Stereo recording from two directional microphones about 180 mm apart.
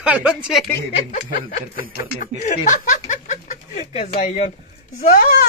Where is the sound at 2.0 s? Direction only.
45° left (ahead or behind).